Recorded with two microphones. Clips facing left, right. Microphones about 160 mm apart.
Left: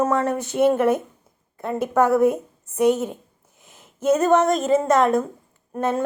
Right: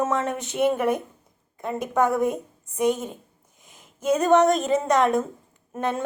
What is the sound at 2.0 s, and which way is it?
A woman's voice, 5° left (ahead or behind).